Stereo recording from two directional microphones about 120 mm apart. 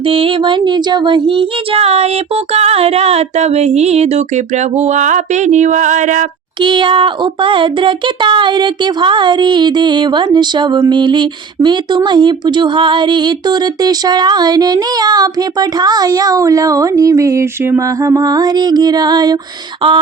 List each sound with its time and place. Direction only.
0.0 s speech: 50° right (ahead or behind); by 6.2 s 90° right
6.6 s speech: 40° right (ahead or behind)